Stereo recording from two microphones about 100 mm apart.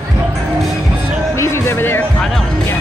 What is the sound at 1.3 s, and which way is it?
Music, 30° left (ahead or behind).